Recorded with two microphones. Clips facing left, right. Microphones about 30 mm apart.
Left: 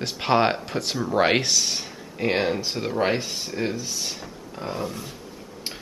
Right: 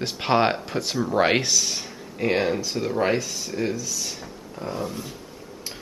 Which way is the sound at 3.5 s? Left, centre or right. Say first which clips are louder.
Right 1 dB; centre.